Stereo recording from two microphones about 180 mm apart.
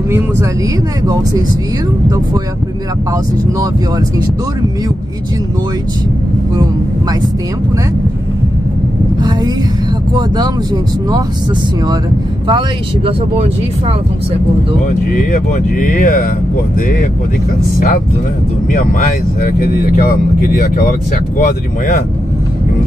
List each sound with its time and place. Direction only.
10.1 s speech: 20° right (ahead or behind)
12.4 s speech: 25° right (ahead or behind)
15.1 s speech: 50° left (ahead or behind)
17.7 s speech: 50° left (ahead or behind)
20.1 s speech: 55° left (ahead or behind)